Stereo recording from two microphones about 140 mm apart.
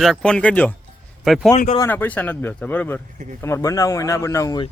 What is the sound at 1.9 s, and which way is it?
A man's voice, 10° left (ahead or behind).